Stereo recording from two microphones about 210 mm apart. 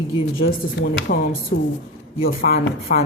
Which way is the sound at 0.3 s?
45° left (ahead or behind).